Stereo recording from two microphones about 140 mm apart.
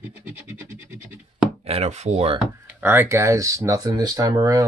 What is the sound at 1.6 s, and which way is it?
Speech, 50° right (ahead or behind).